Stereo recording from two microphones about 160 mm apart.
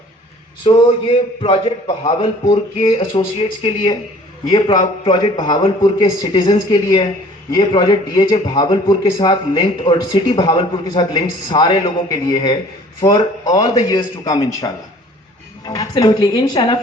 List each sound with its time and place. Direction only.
0.6 s speech: 35° left (ahead or behind)